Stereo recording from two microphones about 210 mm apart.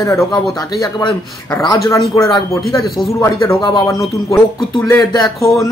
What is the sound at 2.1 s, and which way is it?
A man's voice, 15° left (ahead or behind).